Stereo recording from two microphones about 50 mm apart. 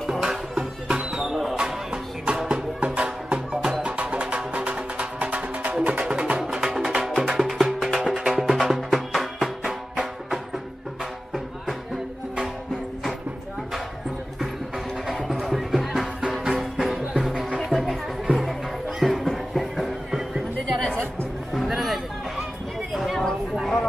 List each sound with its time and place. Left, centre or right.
0.2 s music: centre
0.8 s music: right
1.2 s music: centre
15.0 s music: centre
20.6 s music: centre
21.5 s music: centre
23.6 s a sound: centre